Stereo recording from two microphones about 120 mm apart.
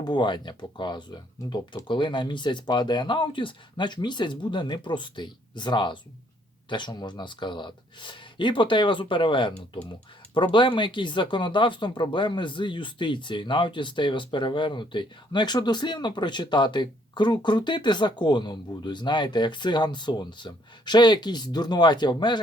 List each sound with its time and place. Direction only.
0.0 s speech: 40° left (ahead or behind)